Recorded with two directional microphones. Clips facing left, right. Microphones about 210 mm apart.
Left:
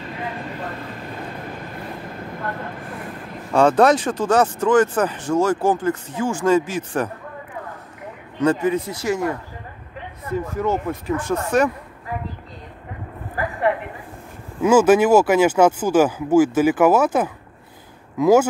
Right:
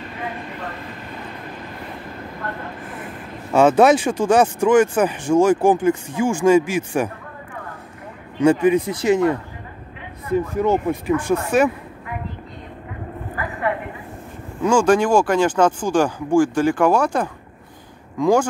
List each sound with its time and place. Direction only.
3.5 s speech: 5° right (ahead or behind)
8.4 s speech: 15° right (ahead or behind)
14.6 s speech: 5° left (ahead or behind)